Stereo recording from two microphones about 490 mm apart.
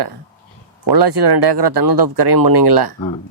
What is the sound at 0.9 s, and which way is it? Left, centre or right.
Speech, right.